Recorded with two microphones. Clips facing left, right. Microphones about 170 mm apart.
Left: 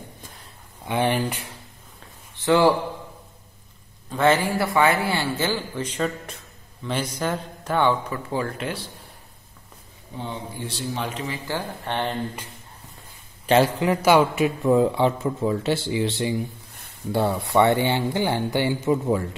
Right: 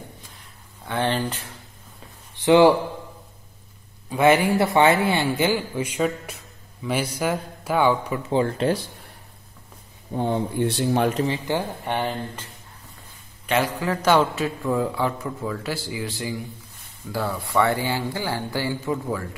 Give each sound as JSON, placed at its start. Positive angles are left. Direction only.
{"t": 0.8, "sound": "speech", "side_deg": 15}
{"t": 2.3, "sound": "a man's voice", "side_deg": -15}
{"t": 4.1, "sound": "a man's voice", "side_deg": -10}
{"t": 10.1, "sound": "speech", "side_deg": -55}
{"t": 11.2, "sound": "speech", "side_deg": -30}
{"t": 11.5, "sound": "a man's voice", "side_deg": -10}
{"t": 13.7, "sound": "speech", "side_deg": 15}